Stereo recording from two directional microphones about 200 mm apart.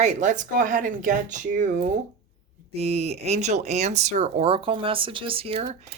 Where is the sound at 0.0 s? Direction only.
35° right (ahead or behind).